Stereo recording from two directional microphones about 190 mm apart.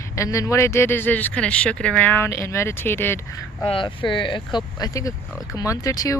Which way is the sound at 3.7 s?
25° left (ahead or behind).